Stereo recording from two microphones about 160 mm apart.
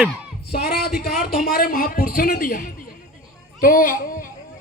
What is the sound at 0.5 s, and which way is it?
A woman's voice, 70° left (ahead or behind).